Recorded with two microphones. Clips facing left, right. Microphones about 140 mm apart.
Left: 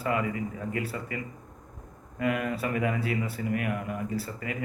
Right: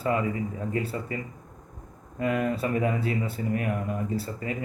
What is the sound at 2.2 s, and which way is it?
A man's voice, 30° right (ahead or behind).